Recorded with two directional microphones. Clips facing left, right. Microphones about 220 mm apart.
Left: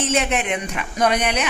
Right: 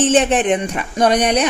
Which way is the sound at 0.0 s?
30° right (ahead or behind).